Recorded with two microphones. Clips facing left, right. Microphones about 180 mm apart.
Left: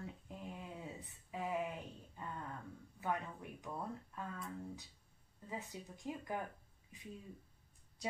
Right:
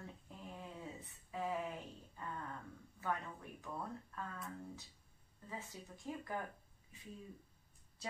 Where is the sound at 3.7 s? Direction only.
20° left (ahead or behind).